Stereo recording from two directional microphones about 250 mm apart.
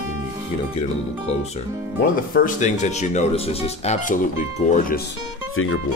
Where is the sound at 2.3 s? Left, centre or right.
Left.